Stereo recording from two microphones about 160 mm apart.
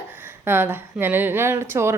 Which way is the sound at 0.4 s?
15° right (ahead or behind).